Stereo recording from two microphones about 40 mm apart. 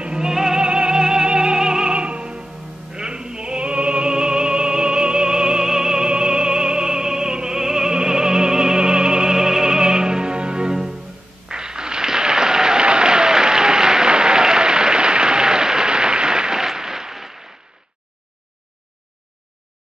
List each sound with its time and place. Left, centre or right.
0.0 s music: right
11.4 s applause: centre